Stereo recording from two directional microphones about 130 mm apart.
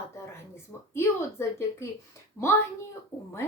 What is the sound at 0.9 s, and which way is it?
Speech, 20° left (ahead or behind).